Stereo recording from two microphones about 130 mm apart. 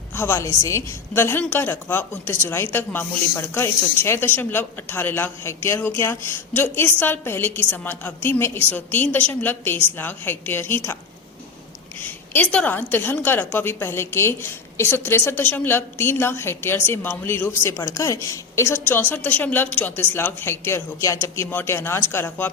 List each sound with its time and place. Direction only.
0.1 s a woman's voice: 20° left (ahead or behind)
11.9 s a woman's voice: 15° left (ahead or behind)